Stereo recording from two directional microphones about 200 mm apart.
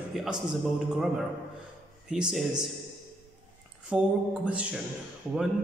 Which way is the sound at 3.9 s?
5° right (ahead or behind).